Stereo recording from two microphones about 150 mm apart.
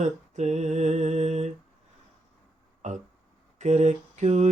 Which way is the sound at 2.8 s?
55° right (ahead or behind).